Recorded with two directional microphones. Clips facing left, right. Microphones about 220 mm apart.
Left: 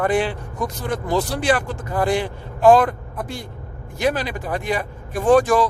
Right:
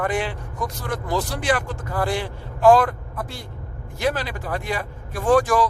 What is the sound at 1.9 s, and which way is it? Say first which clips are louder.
A man's voice: left 4 dB; 15° left (ahead or behind).